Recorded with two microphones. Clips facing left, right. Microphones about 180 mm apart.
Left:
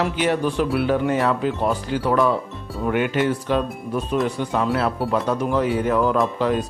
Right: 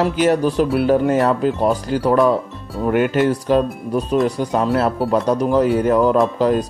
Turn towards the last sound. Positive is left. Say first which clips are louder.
# right 5 dB
turn(degrees=-40)  # may be behind; listen again after turning